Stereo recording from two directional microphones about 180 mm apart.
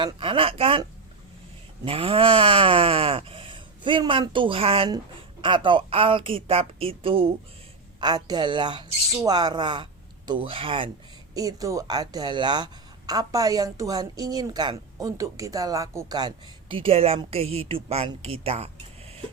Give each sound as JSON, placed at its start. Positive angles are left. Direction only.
{"t": 0.0, "sound": "speech", "side_deg": -30}
{"t": 11.3, "sound": "a woman's voice", "side_deg": -20}